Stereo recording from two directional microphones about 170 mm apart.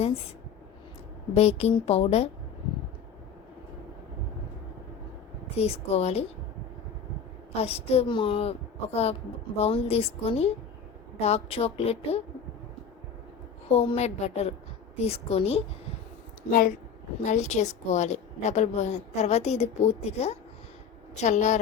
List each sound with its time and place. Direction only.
1.3 s a woman's voice: 40° left (ahead or behind)
5.5 s a woman's voice: 35° left (ahead or behind)
7.5 s a woman's voice: 35° left (ahead or behind)
13.7 s a woman's voice: 35° left (ahead or behind)
16.5 s a woman's voice: 55° left (ahead or behind)
17.2 s a woman's voice: 45° left (ahead or behind)